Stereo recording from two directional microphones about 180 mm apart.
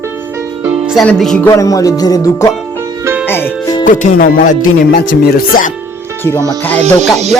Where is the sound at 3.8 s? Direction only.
45° left (ahead or behind).